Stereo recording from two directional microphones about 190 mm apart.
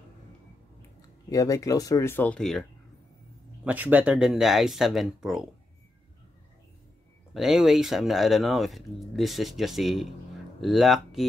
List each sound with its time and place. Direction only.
1.3 s speech: 20° left (ahead or behind)
3.6 s speech: 10° right (ahead or behind)
7.3 s speech: centre (ahead or behind)